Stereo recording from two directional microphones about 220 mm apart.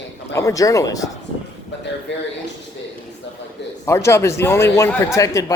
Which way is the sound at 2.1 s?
55° left (ahead or behind).